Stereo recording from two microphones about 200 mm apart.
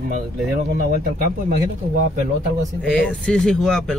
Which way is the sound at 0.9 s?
45° right (ahead or behind).